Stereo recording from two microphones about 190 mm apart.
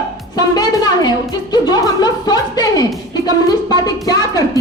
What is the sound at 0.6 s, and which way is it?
A woman's voice, 20° left (ahead or behind).